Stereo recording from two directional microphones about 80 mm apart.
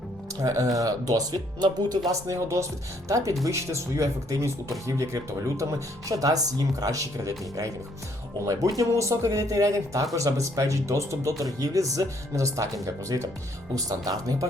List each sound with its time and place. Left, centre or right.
0.4 s speech: right